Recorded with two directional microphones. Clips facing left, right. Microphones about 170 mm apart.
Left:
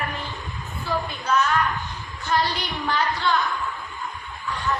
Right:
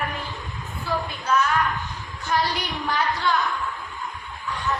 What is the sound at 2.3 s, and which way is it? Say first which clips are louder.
Speech: left 1 dB; 10° right (ahead or behind).